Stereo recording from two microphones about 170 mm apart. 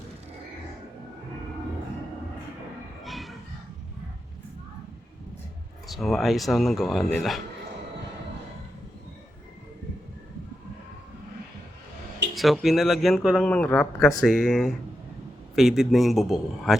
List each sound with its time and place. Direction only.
3.0 s music: centre (ahead or behind)
5.9 s a man's voice: centre (ahead or behind)
12.3 s a man's voice: centre (ahead or behind)